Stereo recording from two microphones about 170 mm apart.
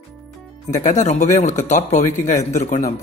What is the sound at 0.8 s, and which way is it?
Speech, 45° left (ahead or behind).